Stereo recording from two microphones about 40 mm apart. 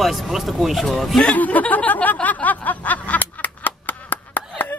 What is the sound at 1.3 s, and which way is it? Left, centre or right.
Speech, left.